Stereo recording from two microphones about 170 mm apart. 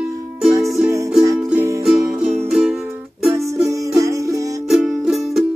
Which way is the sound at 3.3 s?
15° right (ahead or behind).